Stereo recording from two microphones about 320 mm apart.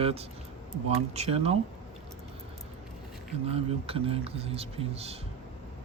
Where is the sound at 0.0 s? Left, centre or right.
Centre.